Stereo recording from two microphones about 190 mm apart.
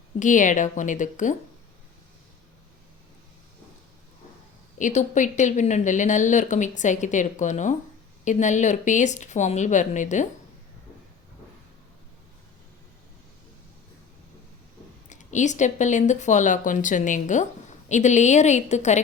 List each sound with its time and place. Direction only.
0.2 s a woman's voice: 40° left (ahead or behind)
4.8 s a woman's voice: 40° left (ahead or behind)
15.1 s a woman's voice: 40° left (ahead or behind)